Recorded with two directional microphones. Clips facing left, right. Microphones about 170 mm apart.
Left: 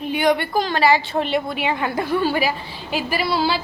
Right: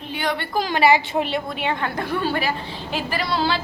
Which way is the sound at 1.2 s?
Centre (ahead or behind).